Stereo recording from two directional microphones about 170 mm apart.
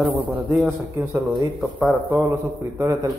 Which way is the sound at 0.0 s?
5° right (ahead or behind).